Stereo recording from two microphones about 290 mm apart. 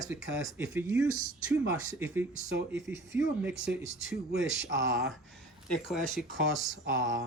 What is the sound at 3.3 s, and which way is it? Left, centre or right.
Speech, right.